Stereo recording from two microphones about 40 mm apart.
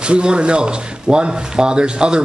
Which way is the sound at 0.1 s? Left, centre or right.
Right.